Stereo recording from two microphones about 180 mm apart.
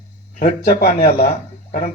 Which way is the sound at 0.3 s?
60° left (ahead or behind).